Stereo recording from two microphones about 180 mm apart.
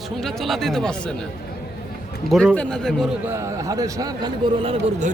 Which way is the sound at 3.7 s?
20° right (ahead or behind).